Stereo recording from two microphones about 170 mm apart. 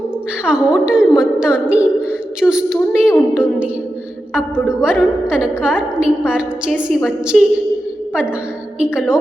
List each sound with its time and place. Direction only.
0.4 s a woman's voice: 5° right (ahead or behind)
4.7 s a woman's voice: 5° right (ahead or behind)
8.8 s a woman's voice: 5° right (ahead or behind)